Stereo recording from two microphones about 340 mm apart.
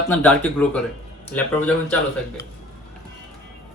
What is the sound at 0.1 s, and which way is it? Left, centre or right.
Speech, centre.